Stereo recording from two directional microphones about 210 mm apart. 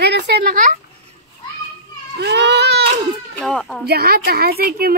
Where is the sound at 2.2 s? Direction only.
55° right (ahead or behind).